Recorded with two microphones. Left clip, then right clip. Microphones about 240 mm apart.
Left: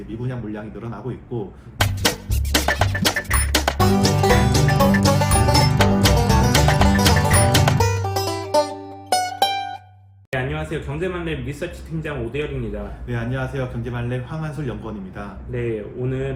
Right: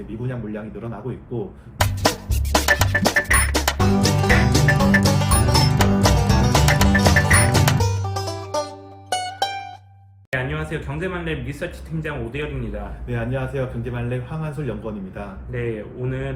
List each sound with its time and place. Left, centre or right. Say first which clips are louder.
0.3 s a man's voice: even; centre
2.8 s music: right 3 dB; centre
8.3 s music: left 7 dB; centre
9.4 s music: left 5 dB; centre
10.3 s speech: even; centre